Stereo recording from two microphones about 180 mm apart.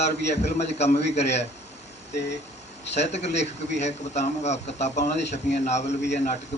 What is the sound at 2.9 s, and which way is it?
A man's voice, 40° left (ahead or behind).